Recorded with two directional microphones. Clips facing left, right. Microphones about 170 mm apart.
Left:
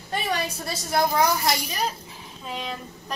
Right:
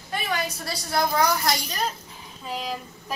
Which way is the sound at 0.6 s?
20° left (ahead or behind).